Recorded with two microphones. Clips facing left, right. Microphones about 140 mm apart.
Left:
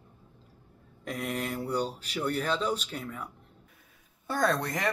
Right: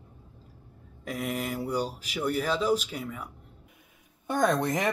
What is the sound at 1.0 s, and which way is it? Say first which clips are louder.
Speech: right 1 dB; 5° right (ahead or behind).